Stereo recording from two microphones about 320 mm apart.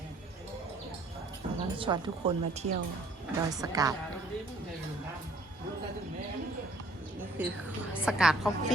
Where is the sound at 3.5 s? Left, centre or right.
Centre.